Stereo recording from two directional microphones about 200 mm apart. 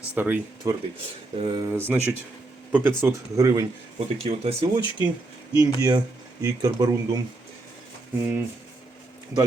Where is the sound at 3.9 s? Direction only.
30° right (ahead or behind).